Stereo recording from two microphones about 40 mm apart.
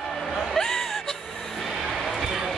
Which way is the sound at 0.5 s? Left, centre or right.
Centre.